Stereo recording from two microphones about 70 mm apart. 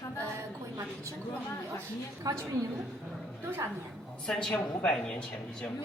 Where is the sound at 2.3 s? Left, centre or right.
Right.